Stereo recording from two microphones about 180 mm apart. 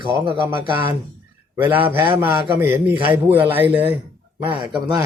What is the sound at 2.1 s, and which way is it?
A man's voice, 10° right (ahead or behind).